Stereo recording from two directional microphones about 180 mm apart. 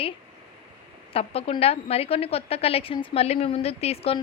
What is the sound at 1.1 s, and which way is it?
A woman's voice, 35° left (ahead or behind).